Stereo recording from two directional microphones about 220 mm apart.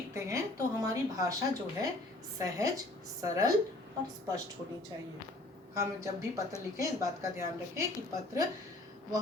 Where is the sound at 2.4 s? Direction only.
15° right (ahead or behind).